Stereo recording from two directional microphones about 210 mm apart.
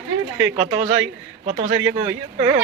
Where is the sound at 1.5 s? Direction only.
30° right (ahead or behind).